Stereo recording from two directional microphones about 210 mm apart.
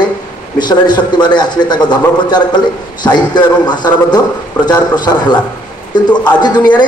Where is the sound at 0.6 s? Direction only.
20° left (ahead or behind).